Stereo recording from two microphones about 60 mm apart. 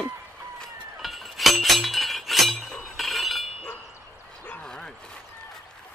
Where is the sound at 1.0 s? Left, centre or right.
Centre.